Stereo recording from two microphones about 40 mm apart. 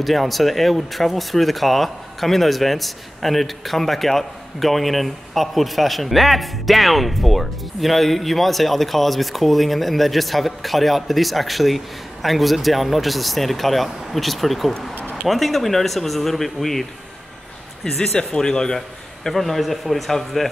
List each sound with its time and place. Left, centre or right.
0.0 s speech: centre
18.1 s speech: centre
19.2 s speech: centre